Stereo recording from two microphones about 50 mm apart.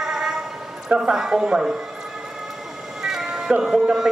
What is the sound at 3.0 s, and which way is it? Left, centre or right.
Cat, centre.